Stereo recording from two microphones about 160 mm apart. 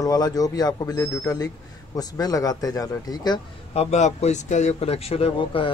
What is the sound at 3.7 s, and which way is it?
Speech, 45° left (ahead or behind).